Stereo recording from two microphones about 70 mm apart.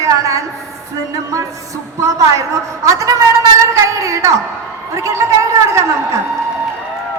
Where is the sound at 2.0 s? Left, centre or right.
Right.